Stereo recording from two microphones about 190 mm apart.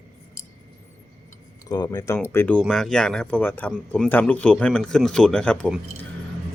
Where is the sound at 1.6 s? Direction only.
20° left (ahead or behind); by 6.1 s 5° left (ahead or behind).